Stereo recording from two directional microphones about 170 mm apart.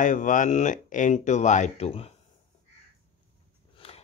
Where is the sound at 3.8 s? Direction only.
35° left (ahead or behind).